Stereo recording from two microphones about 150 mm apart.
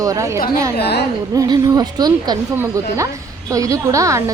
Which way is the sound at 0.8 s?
90° left.